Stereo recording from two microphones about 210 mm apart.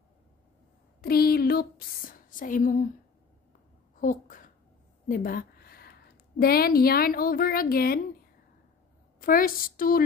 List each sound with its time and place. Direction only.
1.0 s speech: 45° left (ahead or behind)
4.0 s a woman's voice: 40° left (ahead or behind)
9.2 s a woman's voice: 40° left (ahead or behind)